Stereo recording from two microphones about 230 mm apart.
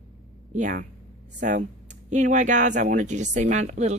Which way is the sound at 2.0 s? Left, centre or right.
Right.